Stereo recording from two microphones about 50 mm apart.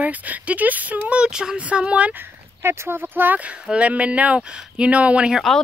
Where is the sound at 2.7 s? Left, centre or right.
Right.